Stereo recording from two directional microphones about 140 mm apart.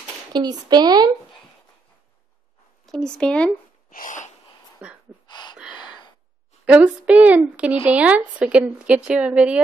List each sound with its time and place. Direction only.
0.3 s a woman's voice: 30° right (ahead or behind)
2.9 s speech: 5° left (ahead or behind)
3.9 s a sound: 70° left (ahead or behind)
4.8 s a sound: 10° right (ahead or behind)
5.2 s gasp: 30° left (ahead or behind)
6.6 s speech: 10° right (ahead or behind)